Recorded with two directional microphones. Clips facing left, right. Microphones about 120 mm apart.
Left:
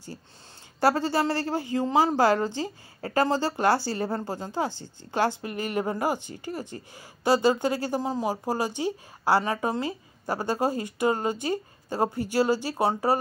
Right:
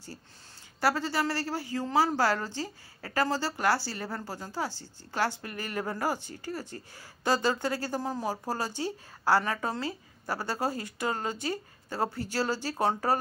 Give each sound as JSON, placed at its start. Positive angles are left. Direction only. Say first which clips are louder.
{"t": 0.7, "sound": "speech", "louder": "left 5 dB", "side_deg": 25}